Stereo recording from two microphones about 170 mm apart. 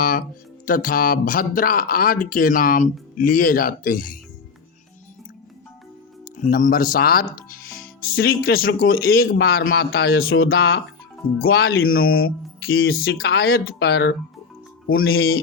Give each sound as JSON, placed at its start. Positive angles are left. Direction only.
{"t": 0.0, "sound": "speech", "side_deg": 55}
{"t": 6.2, "sound": "speech", "side_deg": 50}
{"t": 15.1, "sound": "speech", "side_deg": 65}